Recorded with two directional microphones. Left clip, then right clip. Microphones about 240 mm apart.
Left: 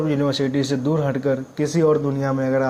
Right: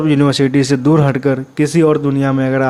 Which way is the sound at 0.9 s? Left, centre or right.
Right.